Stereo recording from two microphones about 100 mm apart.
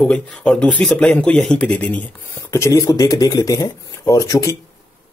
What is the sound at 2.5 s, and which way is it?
Speech, 30° left (ahead or behind).